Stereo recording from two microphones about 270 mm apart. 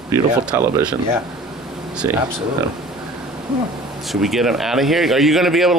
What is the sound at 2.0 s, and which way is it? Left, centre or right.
Speech, centre.